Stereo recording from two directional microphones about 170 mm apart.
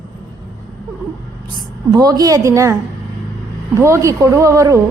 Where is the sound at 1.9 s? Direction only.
20° right (ahead or behind).